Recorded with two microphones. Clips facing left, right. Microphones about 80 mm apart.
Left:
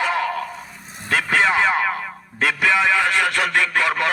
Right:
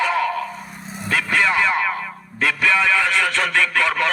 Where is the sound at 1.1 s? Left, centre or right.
Left.